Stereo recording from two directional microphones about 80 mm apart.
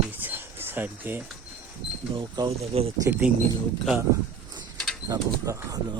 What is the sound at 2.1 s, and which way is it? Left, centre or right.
Speech, right.